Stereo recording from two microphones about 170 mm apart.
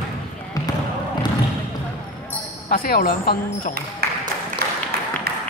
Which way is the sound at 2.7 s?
60° left (ahead or behind).